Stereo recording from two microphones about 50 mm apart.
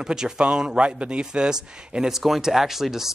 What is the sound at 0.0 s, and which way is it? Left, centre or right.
Speech, centre.